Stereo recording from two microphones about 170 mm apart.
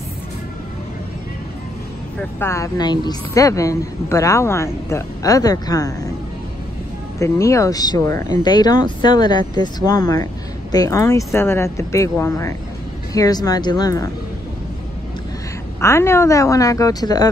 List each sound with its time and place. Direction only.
2.4 s a woman's voice: 20° left (ahead or behind)
7.2 s a woman's voice: 15° left (ahead or behind)
15.8 s a woman's voice: 15° left (ahead or behind)